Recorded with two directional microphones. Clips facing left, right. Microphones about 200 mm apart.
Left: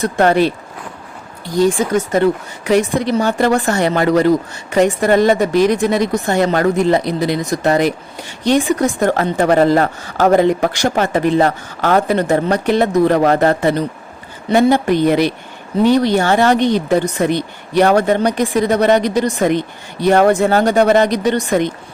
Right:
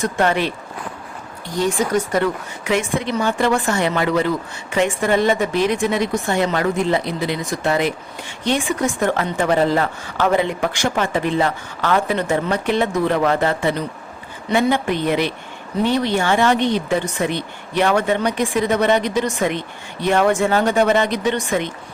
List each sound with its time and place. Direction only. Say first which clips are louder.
0.0 s speech: left 6 dB; 35° left (ahead or behind)
2.1 s speech: left 5 dB; 35° left (ahead or behind)